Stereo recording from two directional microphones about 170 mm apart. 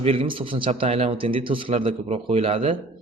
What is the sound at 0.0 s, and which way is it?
A man's voice, 35° right (ahead or behind).